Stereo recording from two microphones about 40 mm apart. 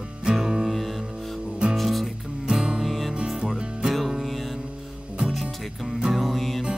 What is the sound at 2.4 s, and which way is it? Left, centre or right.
Music, centre.